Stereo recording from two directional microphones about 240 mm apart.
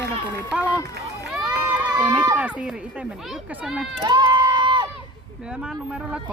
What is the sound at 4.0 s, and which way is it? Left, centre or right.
Crowd, centre.